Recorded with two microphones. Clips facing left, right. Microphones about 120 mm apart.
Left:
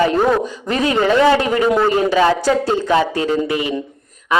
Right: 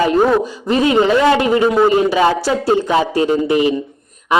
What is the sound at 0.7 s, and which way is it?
A man's voice, 25° right (ahead or behind).